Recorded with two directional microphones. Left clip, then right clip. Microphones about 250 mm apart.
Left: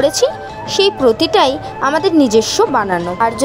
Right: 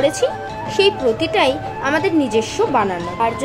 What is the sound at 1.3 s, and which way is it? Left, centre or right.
Speech, left.